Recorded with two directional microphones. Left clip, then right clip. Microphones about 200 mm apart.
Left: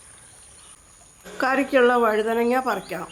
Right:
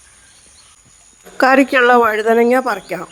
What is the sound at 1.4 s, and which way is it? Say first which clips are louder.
Speech: right 8 dB; 40° right (ahead or behind).